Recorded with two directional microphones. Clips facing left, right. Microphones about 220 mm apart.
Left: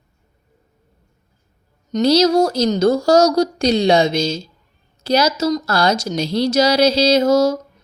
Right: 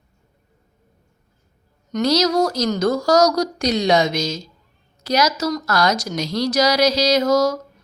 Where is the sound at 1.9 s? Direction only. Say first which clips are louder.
Left 4 dB; 30° left (ahead or behind).